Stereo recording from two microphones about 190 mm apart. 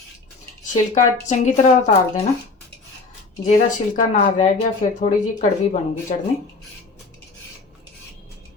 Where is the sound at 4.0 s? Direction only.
40° left (ahead or behind).